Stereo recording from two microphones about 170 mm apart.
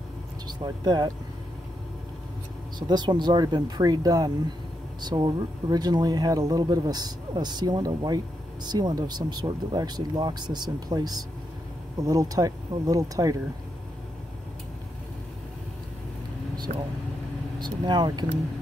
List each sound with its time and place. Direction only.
0.5 s speech: 25° right (ahead or behind)
2.9 s speech: 25° right (ahead or behind)
16.7 s speech: 50° right (ahead or behind)
17.6 s speech: 25° right (ahead or behind)